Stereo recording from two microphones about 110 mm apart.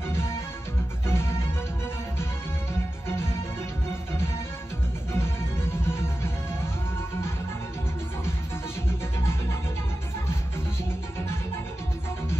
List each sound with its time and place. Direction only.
0.1 s music: 20° left (ahead or behind)
3.1 s music: 20° left (ahead or behind)
8.8 s music: 25° left (ahead or behind)